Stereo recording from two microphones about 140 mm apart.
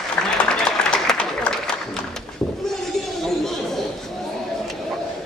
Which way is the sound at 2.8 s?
5° left (ahead or behind).